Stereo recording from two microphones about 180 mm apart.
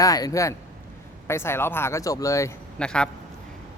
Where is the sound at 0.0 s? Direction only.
20° left (ahead or behind).